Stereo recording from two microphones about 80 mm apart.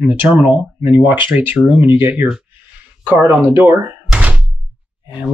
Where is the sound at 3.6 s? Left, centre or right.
Right.